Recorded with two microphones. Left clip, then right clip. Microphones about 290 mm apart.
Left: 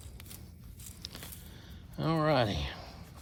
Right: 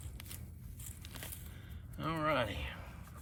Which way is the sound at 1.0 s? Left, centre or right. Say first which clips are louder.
Left 4 dB; centre.